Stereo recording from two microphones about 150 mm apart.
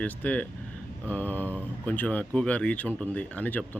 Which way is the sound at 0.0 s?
10° left (ahead or behind).